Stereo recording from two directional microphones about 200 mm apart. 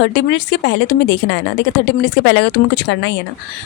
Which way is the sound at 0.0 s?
60° left (ahead or behind).